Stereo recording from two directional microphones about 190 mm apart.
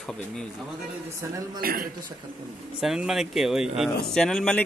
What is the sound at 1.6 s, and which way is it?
Speech, 50° right (ahead or behind).